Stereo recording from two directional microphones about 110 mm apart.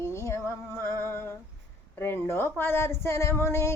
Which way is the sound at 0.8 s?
20° left (ahead or behind).